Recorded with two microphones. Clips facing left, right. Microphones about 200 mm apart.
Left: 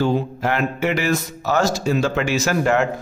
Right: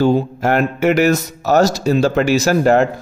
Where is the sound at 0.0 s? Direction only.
45° right (ahead or behind).